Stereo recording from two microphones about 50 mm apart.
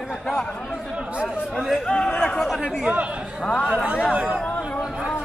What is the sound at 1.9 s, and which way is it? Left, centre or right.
Chatter, left.